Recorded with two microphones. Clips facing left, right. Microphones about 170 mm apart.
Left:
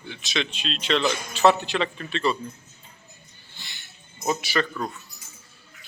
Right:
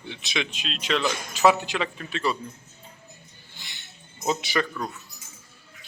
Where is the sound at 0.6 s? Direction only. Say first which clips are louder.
Left 3 dB; 5° right (ahead or behind).